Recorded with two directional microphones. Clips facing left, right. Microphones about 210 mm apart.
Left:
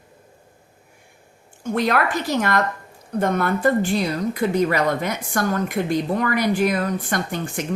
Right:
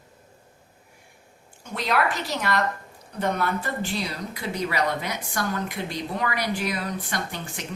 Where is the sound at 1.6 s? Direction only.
50° left (ahead or behind).